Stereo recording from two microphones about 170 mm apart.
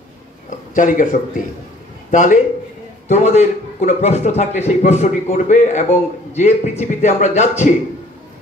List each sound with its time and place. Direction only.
0.7 s a man's voice: 50° left (ahead or behind)